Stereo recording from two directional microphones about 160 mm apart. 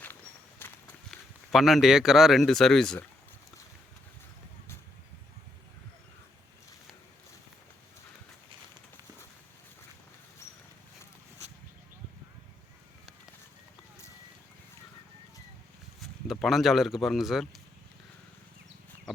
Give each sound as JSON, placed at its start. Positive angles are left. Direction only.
{"t": 0.6, "sound": "walk", "side_deg": 15}
{"t": 1.5, "sound": "speech", "side_deg": 0}
{"t": 10.4, "sound": "a sound", "side_deg": 20}
{"t": 16.0, "sound": "speech", "side_deg": 0}